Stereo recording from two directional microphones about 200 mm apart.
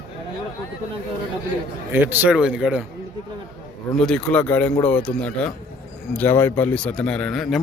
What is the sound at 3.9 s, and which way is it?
Speech, 5° left (ahead or behind).